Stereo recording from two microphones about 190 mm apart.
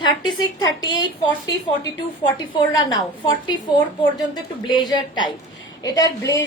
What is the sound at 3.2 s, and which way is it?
Speech, 25° left (ahead or behind).